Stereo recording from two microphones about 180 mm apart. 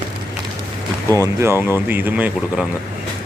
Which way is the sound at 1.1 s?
15° right (ahead or behind).